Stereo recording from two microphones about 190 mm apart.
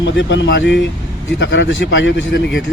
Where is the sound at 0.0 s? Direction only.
70° left (ahead or behind).